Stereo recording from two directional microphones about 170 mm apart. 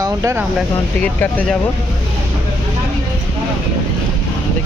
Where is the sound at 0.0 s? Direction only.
15° right (ahead or behind).